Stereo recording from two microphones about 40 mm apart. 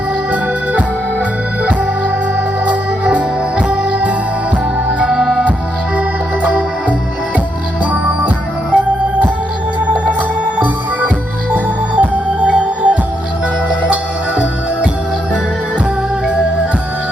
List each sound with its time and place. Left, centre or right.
0.3 s organ: right
2.6 s music: right
5.0 s music: centre
6.4 s music: right
8.7 s organ: right
10.2 s music: right